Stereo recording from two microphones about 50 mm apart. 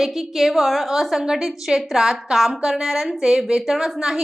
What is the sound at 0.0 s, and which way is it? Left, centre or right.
A woman's voice, centre.